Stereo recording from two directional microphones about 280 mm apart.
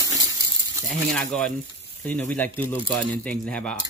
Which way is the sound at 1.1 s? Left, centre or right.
Centre.